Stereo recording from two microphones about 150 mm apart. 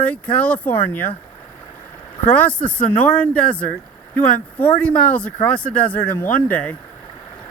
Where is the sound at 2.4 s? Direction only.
10° left (ahead or behind).